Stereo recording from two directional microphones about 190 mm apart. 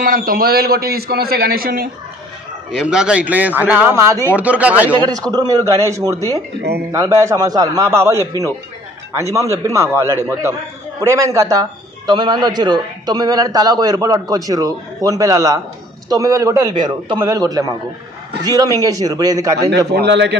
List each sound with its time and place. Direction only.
0.0 s a man's voice: 50° right (ahead or behind)
2.7 s a man's voice: 5° right (ahead or behind)
19.9 s speech: 65° right (ahead or behind)